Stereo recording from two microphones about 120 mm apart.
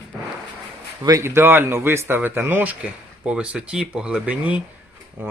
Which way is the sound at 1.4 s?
20° right (ahead or behind).